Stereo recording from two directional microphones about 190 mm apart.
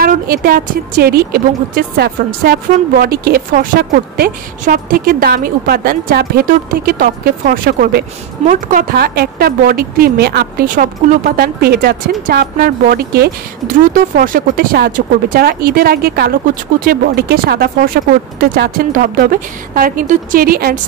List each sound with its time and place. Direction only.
0.0 s a woman's voice: 50° right (ahead or behind)
8.9 s a woman's voice: 55° right (ahead or behind)